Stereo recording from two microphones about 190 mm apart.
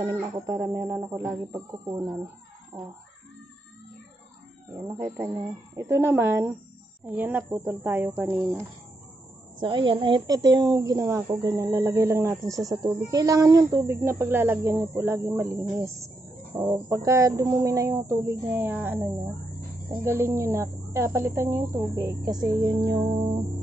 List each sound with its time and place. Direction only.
0.0 s a woman's voice: 20° right (ahead or behind)
4.8 s a woman's voice: 15° right (ahead or behind)
9.6 s a woman's voice: 25° right (ahead or behind); by 18.9 s 10° right (ahead or behind)
20.0 s a woman's voice: 15° right (ahead or behind)